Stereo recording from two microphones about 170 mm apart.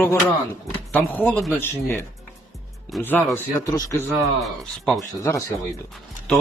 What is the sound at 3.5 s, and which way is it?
Speech, 20° left (ahead or behind).